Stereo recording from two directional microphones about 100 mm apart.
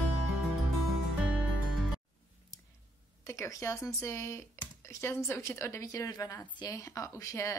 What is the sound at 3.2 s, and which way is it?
Speech, 30° left (ahead or behind).